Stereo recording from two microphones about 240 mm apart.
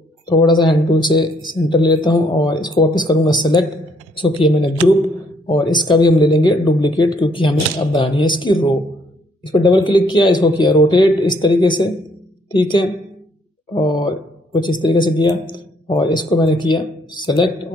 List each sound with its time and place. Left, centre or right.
0.3 s speech: centre